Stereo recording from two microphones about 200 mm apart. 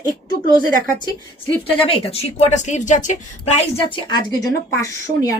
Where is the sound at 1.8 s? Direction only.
30° left (ahead or behind).